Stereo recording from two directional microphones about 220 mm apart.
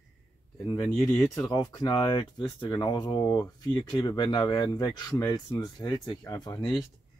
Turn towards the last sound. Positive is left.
turn(degrees=20)  # may be behind; listen again after turning